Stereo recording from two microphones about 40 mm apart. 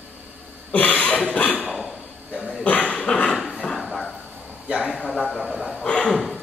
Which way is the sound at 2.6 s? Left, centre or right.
Left.